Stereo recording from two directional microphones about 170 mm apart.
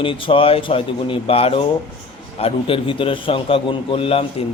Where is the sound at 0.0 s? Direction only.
30° left (ahead or behind).